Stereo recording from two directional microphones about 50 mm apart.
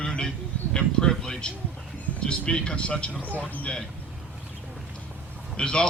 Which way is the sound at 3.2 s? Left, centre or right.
Left.